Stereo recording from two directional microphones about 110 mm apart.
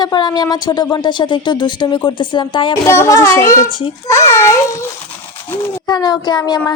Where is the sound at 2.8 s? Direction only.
25° left (ahead or behind).